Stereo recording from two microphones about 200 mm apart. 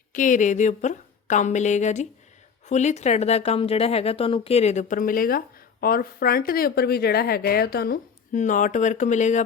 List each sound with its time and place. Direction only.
0.1 s a woman's voice: 40° left (ahead or behind)